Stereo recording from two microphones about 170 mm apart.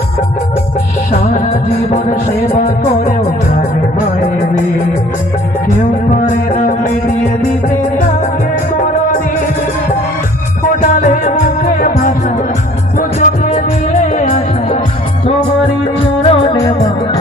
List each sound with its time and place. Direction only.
2.5 s music: 45° left (ahead or behind)
6.2 s music: 50° left (ahead or behind)
10.8 s music: 50° left (ahead or behind)
13.2 s music: 50° left (ahead or behind)
16.0 s music: 40° left (ahead or behind)
16.5 s music: 20° left (ahead or behind)